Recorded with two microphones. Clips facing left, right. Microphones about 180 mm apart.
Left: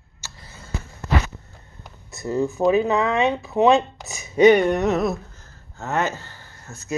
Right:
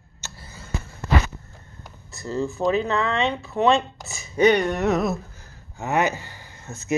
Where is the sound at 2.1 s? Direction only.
15° left (ahead or behind).